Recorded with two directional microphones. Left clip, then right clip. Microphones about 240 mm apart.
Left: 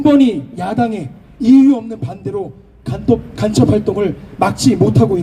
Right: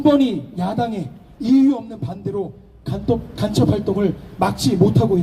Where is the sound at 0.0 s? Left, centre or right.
Left.